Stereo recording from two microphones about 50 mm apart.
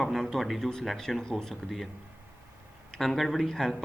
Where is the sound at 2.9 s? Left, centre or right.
Centre.